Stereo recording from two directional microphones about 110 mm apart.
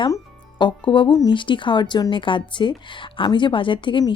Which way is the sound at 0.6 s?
50° left (ahead or behind).